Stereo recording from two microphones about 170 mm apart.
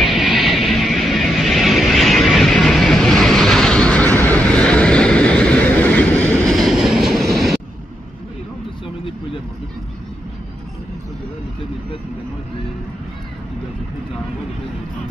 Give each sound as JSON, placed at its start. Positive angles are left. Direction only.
{"t": 0.0, "sound": "music", "side_deg": 0}
{"t": 6.5, "sound": "train", "side_deg": 0}
{"t": 8.8, "sound": "a sound", "side_deg": 30}